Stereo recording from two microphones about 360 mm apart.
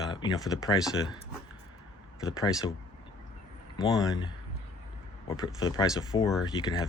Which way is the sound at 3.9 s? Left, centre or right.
Centre.